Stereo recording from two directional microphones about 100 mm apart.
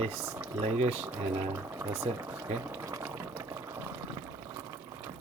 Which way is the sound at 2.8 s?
30° right (ahead or behind).